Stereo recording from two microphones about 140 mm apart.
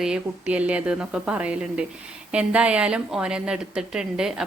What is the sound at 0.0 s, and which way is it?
Speech, 10° right (ahead or behind).